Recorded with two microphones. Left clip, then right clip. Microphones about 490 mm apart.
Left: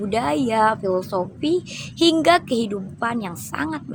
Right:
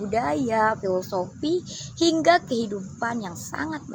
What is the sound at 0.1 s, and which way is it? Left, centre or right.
A woman's voice, right.